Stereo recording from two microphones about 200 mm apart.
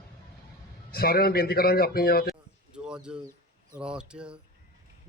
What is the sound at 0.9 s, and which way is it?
Mantra, 50° left (ahead or behind).